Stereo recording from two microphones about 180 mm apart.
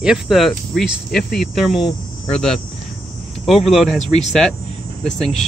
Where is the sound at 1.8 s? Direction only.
25° left (ahead or behind).